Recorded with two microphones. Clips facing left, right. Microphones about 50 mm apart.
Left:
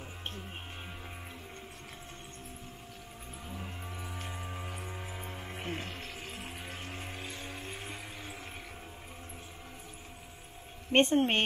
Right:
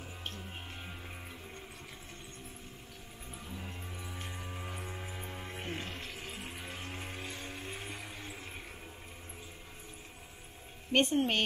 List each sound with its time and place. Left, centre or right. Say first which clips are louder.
3.4 s vehicle: left 2 dB; centre
4.3 s music: left 2 dB; centre
10.9 s speech: left 3 dB; left